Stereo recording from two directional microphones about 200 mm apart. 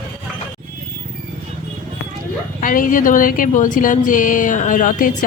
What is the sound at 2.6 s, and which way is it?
A woman's voice, 40° left (ahead or behind).